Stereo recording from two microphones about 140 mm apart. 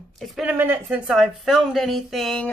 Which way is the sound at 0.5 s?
15° right (ahead or behind).